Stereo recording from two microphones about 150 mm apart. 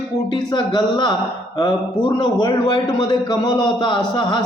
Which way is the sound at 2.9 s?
30° left (ahead or behind).